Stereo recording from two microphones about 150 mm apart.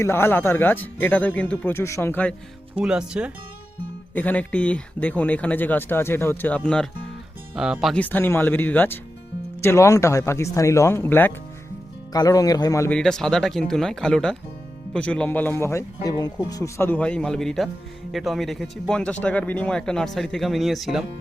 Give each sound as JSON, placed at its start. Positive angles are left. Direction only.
{"t": 0.0, "sound": "speech", "side_deg": 15}
{"t": 2.7, "sound": "speech", "side_deg": -5}
{"t": 4.1, "sound": "speech", "side_deg": 10}
{"t": 7.5, "sound": "speech", "side_deg": -5}
{"t": 7.9, "sound": "speech", "side_deg": 10}
{"t": 12.1, "sound": "speech", "side_deg": 25}
{"t": 12.9, "sound": "speech", "side_deg": 5}